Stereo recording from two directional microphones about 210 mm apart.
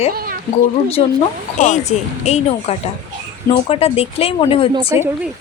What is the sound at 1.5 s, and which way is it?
A woman's voice, 35° left (ahead or behind).